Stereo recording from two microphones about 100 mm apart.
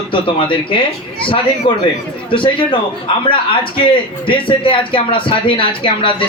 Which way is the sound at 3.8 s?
60° left (ahead or behind).